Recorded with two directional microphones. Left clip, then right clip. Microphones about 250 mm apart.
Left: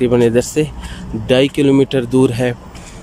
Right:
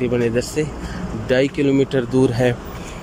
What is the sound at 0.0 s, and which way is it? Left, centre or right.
Speech, centre.